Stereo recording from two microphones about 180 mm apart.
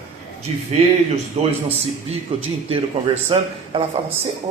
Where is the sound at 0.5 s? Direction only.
35° right (ahead or behind).